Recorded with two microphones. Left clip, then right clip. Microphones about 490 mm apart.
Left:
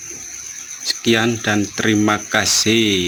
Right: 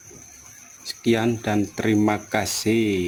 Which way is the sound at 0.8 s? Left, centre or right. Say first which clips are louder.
Left 6 dB; right.